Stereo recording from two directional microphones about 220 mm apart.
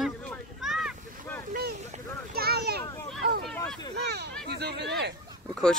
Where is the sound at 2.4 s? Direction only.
45° right (ahead or behind).